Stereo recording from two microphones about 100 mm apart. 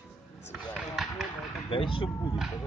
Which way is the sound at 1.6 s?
60° left (ahead or behind).